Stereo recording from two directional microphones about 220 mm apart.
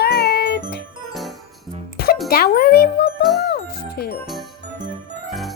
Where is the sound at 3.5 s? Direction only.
45° left (ahead or behind).